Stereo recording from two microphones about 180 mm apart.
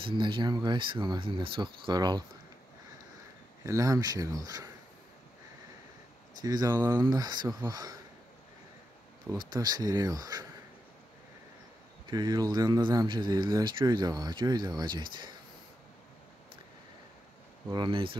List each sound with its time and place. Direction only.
0.0 s speech: 25° right (ahead or behind)
3.6 s speech: 20° right (ahead or behind)
6.4 s speech: 20° right (ahead or behind)
9.5 s speech: 20° right (ahead or behind)
12.1 s speech: 20° right (ahead or behind)
17.6 s speech: 25° right (ahead or behind)